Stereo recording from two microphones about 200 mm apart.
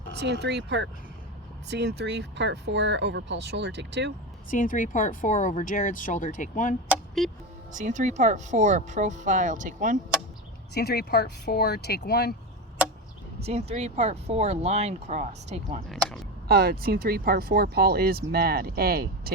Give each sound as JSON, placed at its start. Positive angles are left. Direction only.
{"t": 0.2, "sound": "speech", "side_deg": -60}
{"t": 4.5, "sound": "speech", "side_deg": 40}
{"t": 7.2, "sound": "speech", "side_deg": 0}
{"t": 7.7, "sound": "speech", "side_deg": -40}
{"t": 10.8, "sound": "speech", "side_deg": 55}
{"t": 13.4, "sound": "speech", "side_deg": -30}
{"t": 15.9, "sound": "speech", "side_deg": 0}
{"t": 16.5, "sound": "speech", "side_deg": -50}